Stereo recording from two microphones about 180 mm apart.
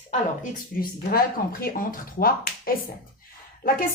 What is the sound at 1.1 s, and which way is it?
A woman's voice, 55° left (ahead or behind).